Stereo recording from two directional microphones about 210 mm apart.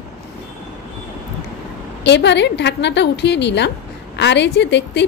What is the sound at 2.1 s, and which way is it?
A woman's voice, 55° left (ahead or behind).